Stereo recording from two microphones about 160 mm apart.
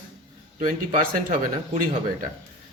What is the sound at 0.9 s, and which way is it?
Speech, 55° right (ahead or behind).